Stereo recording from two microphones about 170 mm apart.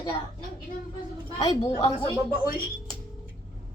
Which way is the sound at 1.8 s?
25° left (ahead or behind).